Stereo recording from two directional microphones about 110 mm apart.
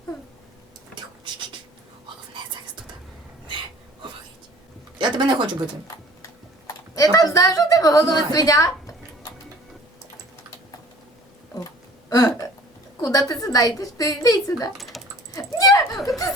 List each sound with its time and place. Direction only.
4.9 s speech: 45° right (ahead or behind)
5.9 s tick-tock: 35° left (ahead or behind)
6.7 s a sound: 30° left (ahead or behind)
12.0 s hiccup: 35° left (ahead or behind)
13.0 s a woman's voice: 35° left (ahead or behind)
14.8 s typing: centre (ahead or behind)
15.4 s a sound: 35° left (ahead or behind)